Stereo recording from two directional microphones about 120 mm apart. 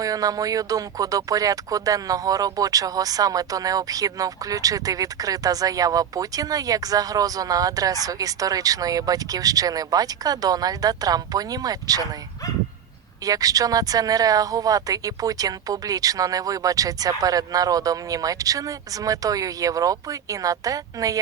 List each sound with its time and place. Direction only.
0.0 s speech: 30° right (ahead or behind)
13.2 s speech: 30° right (ahead or behind)